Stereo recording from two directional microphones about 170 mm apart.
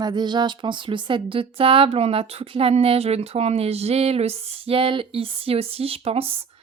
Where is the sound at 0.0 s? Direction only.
25° right (ahead or behind).